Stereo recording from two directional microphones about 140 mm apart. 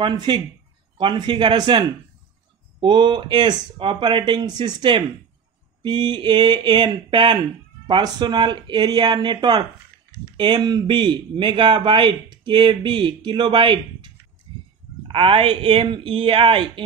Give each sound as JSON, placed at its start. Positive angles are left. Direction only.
{"t": 0.0, "sound": "speech", "side_deg": -30}